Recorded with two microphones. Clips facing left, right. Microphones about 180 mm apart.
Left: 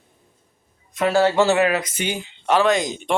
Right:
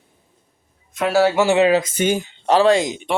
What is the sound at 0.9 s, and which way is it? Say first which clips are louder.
Speech: right 1 dB; 5° right (ahead or behind).